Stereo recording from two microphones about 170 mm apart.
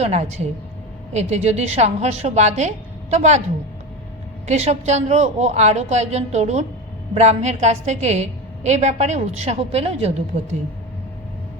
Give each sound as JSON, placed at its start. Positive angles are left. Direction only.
{"t": 0.0, "sound": "a woman's voice", "side_deg": -40}
{"t": 4.4, "sound": "a woman's voice", "side_deg": -40}